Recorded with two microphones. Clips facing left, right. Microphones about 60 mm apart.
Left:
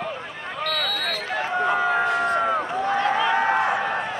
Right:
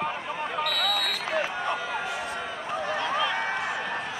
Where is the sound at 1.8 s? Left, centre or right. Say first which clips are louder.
Left 10 dB; left.